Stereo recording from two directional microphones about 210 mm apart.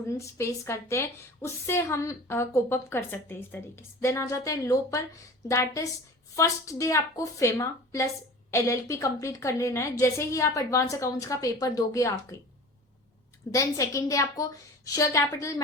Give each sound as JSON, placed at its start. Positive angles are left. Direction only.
{"t": 0.1, "sound": "a woman's voice", "side_deg": 15}
{"t": 13.5, "sound": "a woman's voice", "side_deg": 15}